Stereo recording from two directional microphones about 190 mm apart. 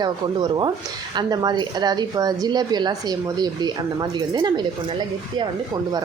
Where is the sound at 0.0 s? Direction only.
25° right (ahead or behind).